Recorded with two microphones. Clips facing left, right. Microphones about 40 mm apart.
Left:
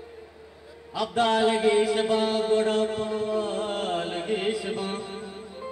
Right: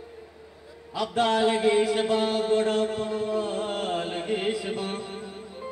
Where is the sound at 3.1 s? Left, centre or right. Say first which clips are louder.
Even; left.